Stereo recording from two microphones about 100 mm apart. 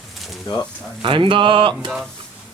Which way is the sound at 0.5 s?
50° left (ahead or behind).